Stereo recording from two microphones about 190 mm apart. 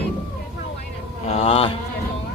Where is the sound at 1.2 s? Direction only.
35° left (ahead or behind).